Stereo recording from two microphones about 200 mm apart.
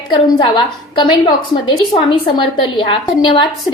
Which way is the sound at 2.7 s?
25° left (ahead or behind).